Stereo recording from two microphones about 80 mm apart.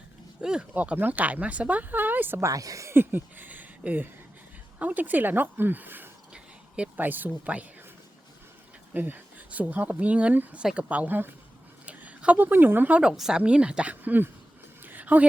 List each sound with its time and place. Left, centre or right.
0.4 s speech: centre
2.4 s a woman's voice: right
2.9 s speech: right
6.3 s speech: centre
8.9 s a woman's voice: right
13.0 s speech: centre
14.0 s speech: right
14.8 s a sound: right